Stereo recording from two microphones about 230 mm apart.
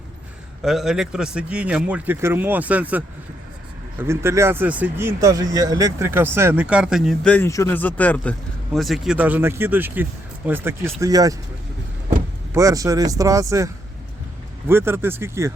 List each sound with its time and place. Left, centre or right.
0.6 s a man's voice: centre
12.5 s speech: centre
14.7 s speech: centre